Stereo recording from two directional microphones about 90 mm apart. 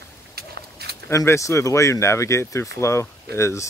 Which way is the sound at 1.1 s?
35° left (ahead or behind).